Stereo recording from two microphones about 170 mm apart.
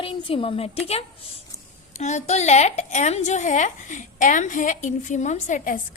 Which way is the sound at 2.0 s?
45° left (ahead or behind).